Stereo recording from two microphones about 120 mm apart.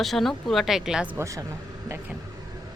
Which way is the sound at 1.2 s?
25° right (ahead or behind).